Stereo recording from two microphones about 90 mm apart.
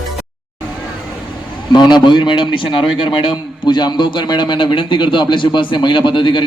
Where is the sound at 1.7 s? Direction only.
55° left (ahead or behind).